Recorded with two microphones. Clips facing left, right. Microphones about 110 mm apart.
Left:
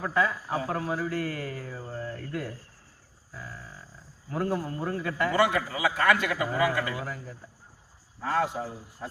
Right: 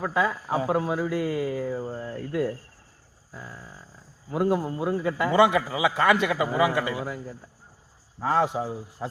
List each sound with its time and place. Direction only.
0.0 s a man's voice: 15° right (ahead or behind)
3.3 s a sound: 20° right (ahead or behind)
4.3 s a man's voice: 15° right (ahead or behind)
8.2 s speech: 20° right (ahead or behind)